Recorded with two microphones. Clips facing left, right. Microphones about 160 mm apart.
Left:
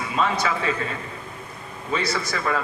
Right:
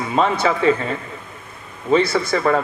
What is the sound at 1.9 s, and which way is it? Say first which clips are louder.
Speech: right 9 dB; 30° right (ahead or behind).